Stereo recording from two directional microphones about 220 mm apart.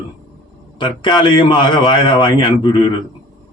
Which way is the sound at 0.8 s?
20° left (ahead or behind).